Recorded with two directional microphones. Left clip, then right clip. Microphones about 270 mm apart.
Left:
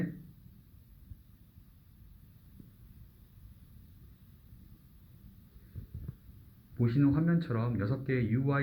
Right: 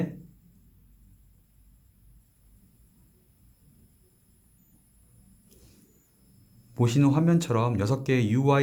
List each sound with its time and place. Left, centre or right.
6.7 s speech: right